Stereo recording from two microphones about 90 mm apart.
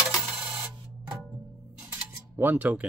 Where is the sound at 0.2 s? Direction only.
15° right (ahead or behind).